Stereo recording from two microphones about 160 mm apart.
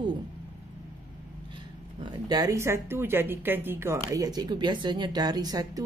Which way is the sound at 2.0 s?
25° right (ahead or behind).